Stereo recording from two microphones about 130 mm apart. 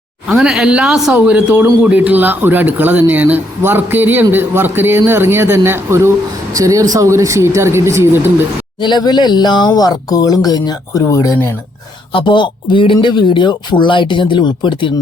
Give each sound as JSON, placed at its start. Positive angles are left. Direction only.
{"t": 0.3, "sound": "speech", "side_deg": -5}
{"t": 8.8, "sound": "speech", "side_deg": 35}
{"t": 12.1, "sound": "speech", "side_deg": 40}